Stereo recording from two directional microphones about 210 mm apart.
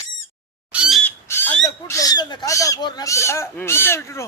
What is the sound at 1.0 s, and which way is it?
Squawk, 10° left (ahead or behind).